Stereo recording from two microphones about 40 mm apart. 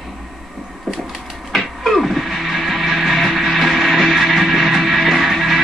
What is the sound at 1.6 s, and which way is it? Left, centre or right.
Music, centre.